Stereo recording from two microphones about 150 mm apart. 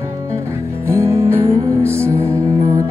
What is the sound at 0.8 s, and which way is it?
Music, 20° right (ahead or behind).